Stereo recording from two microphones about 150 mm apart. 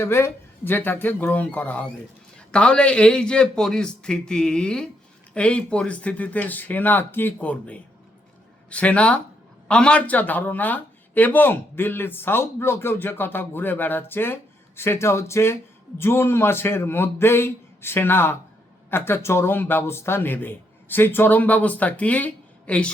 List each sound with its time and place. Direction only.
0.0 s a man's voice: 15° left (ahead or behind)